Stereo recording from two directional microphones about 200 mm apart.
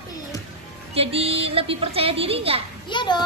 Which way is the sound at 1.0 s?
30° right (ahead or behind).